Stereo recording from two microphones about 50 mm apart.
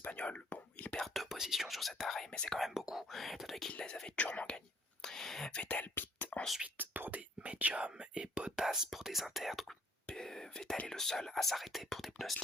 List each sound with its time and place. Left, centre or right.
0.0 s whispering: left
1.0 s speech: centre
2.3 s speech: centre
2.6 s speech: centre
3.7 s speech: centre
5.0 s whispering: centre
5.5 s speech: left
5.9 s whispering: left
6.7 s speech: right; by 9.7 s centre
10.1 s speech: centre